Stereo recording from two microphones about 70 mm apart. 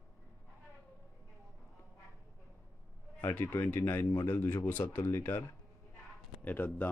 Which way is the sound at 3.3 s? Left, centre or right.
Left.